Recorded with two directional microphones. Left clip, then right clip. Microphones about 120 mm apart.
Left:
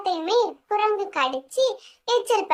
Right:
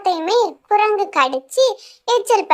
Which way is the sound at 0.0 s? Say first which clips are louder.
Right 5 dB; 40° right (ahead or behind).